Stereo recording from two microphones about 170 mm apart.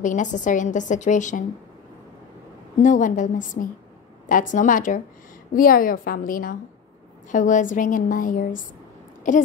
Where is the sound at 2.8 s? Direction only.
50° left (ahead or behind).